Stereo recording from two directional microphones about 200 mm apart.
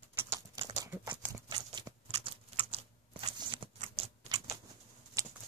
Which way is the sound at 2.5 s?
30° right (ahead or behind).